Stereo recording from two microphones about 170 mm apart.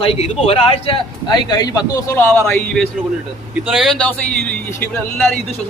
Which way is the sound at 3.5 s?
Centre (ahead or behind).